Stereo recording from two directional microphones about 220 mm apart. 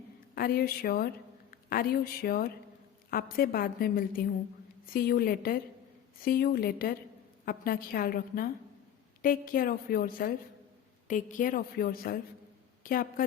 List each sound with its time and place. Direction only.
0.3 s a woman's voice: 40° left (ahead or behind)